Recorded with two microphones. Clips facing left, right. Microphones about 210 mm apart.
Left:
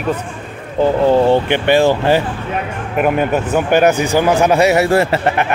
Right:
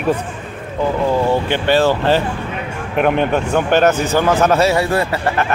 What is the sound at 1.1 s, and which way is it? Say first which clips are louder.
Speech: left 5 dB; 30° left (ahead or behind).